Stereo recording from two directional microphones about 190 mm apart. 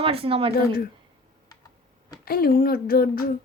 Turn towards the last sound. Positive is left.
turn(degrees=50)  # may be behind; listen again after turning